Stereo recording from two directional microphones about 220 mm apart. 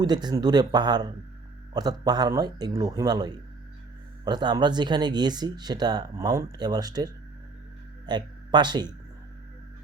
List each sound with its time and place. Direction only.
0.0 s a man's voice: 20° right (ahead or behind)